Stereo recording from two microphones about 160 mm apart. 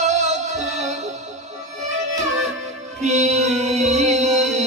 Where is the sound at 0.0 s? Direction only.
45° right (ahead or behind).